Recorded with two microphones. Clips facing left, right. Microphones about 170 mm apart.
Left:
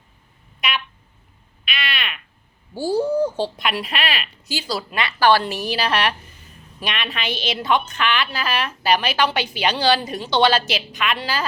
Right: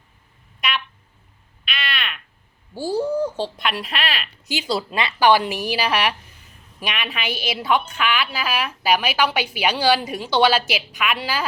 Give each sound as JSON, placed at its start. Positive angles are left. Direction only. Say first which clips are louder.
{"t": 1.6, "sound": "frog", "louder": "left 1 dB", "side_deg": 0}
{"t": 2.7, "sound": "speech", "louder": "left 2 dB", "side_deg": 0}
{"t": 4.4, "sound": "a woman's voice", "louder": "right 3 dB", "side_deg": -20}